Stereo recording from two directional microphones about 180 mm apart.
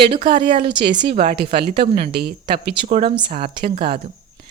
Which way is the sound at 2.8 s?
40° right (ahead or behind).